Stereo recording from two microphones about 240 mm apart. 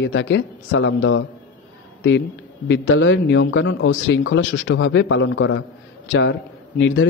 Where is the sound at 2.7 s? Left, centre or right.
Left.